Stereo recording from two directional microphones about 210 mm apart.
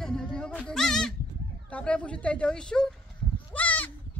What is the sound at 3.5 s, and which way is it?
Goat, 5° left (ahead or behind).